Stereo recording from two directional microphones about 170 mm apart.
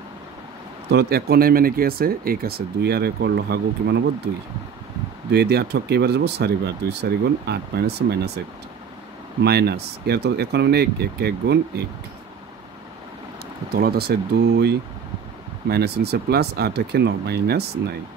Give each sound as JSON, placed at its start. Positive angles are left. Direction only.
{"t": 0.9, "sound": "speech", "side_deg": -70}
{"t": 5.3, "sound": "speech", "side_deg": -75}
{"t": 9.4, "sound": "speech", "side_deg": -70}
{"t": 13.7, "sound": "speech", "side_deg": -65}